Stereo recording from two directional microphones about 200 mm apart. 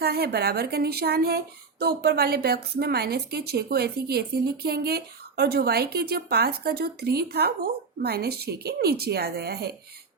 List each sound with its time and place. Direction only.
0.0 s a woman's voice: 50° right (ahead or behind)